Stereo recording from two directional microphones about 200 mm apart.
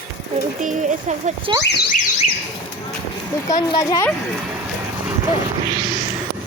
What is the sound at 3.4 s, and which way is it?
Speech, 20° left (ahead or behind).